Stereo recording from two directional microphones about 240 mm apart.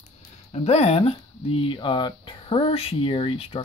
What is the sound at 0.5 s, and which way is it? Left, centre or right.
Speech, left.